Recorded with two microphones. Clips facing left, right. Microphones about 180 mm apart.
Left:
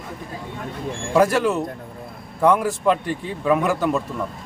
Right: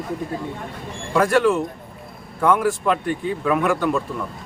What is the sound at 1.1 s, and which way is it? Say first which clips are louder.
A man's voice: right 1 dB; 5° left (ahead or behind).